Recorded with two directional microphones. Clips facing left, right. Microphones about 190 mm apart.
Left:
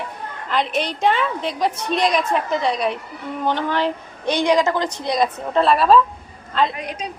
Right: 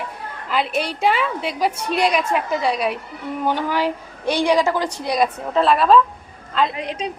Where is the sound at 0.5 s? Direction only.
5° right (ahead or behind).